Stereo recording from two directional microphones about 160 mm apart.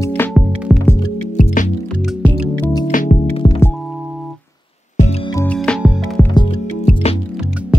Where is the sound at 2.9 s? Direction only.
50° left (ahead or behind).